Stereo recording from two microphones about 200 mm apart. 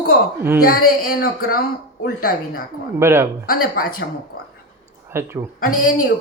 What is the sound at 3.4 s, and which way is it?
Speech, 45° left (ahead or behind).